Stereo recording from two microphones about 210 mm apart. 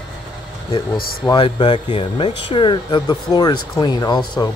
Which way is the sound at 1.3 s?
25° left (ahead or behind).